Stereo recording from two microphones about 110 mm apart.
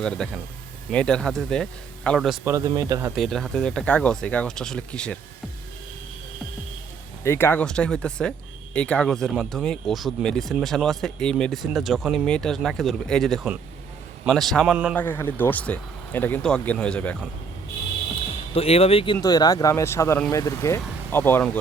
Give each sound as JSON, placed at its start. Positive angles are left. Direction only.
{"t": 0.0, "sound": "speech", "side_deg": 5}
{"t": 2.4, "sound": "speech", "side_deg": -25}
{"t": 3.2, "sound": "speech", "side_deg": 0}
{"t": 7.3, "sound": "speech", "side_deg": 20}
{"t": 7.6, "sound": "speech", "side_deg": 5}
{"t": 14.9, "sound": "speech", "side_deg": 20}
{"t": 16.4, "sound": "speech", "side_deg": 5}
{"t": 18.5, "sound": "speech", "side_deg": 65}
{"t": 19.2, "sound": "speech", "side_deg": 35}